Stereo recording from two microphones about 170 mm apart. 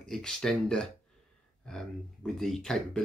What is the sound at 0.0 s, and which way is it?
Speech, 5° left (ahead or behind).